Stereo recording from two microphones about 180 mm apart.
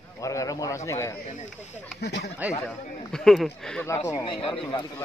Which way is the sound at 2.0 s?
65° left (ahead or behind).